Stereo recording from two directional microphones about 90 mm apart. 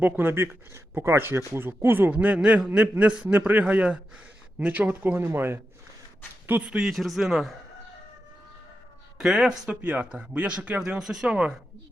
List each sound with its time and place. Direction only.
0.0 s speech: 25° right (ahead or behind)
6.5 s a man's voice: 10° right (ahead or behind)
9.1 s speech: 5° right (ahead or behind)